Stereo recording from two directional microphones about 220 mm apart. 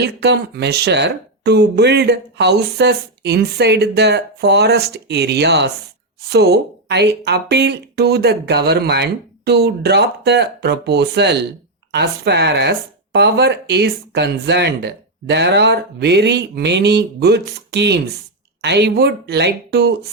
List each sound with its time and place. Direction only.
0.0 s speech: 50° right (ahead or behind)